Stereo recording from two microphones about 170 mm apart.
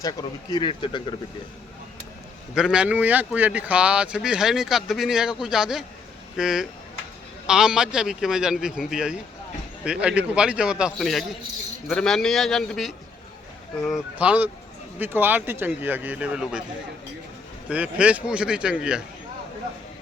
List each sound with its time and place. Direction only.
0.0 s speech: 25° left (ahead or behind)
2.6 s speech: 5° right (ahead or behind)
17.7 s speech: 5° right (ahead or behind)